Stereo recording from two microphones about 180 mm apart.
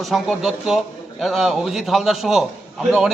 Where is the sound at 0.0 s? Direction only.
Centre (ahead or behind).